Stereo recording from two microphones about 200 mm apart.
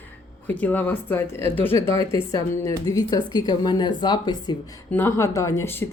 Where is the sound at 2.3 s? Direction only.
15° left (ahead or behind).